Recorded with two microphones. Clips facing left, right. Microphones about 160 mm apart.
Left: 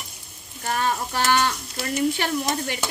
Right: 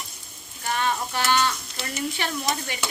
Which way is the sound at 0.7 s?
40° left (ahead or behind).